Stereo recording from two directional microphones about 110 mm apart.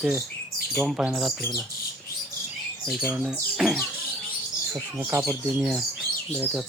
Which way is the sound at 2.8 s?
Centre (ahead or behind).